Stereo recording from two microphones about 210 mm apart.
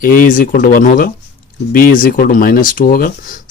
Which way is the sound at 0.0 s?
40° left (ahead or behind).